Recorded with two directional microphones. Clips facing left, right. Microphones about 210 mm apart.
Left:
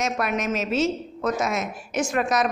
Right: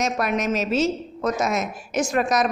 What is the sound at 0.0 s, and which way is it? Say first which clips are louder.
A woman's voice: right 2 dB; 40° right (ahead or behind).